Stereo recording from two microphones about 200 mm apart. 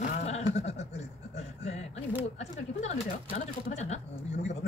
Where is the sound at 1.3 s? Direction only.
35° left (ahead or behind).